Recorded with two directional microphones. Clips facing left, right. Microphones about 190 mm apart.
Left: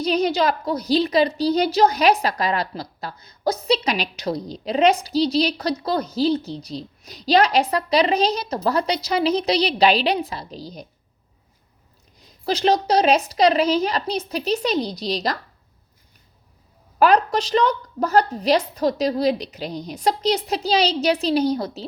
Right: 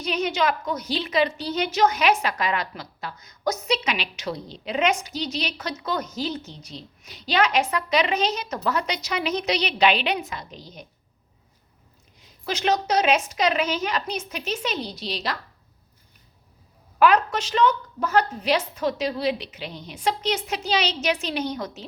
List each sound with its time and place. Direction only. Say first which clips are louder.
0.0 s a woman's voice: left 5 dB; 35° left (ahead or behind)
12.2 s a woman's voice: left 5 dB; 35° left (ahead or behind)
17.0 s a woman's voice: left 2 dB; 35° left (ahead or behind)